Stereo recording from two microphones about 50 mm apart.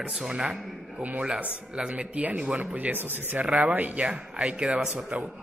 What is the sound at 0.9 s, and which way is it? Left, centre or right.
Speech, right.